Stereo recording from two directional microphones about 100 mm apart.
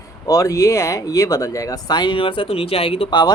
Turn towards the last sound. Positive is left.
turn(degrees=70)  # may be behind; listen again after turning